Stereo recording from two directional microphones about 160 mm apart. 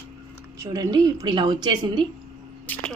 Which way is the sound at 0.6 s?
25° right (ahead or behind).